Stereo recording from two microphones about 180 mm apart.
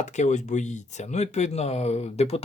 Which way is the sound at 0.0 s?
40° left (ahead or behind).